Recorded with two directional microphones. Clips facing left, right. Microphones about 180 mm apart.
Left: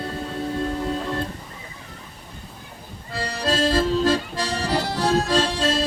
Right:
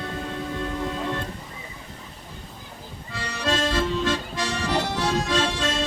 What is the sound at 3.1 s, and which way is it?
Accordion, 35° left (ahead or behind).